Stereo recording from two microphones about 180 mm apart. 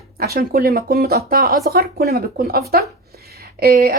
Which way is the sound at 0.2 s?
55° right (ahead or behind).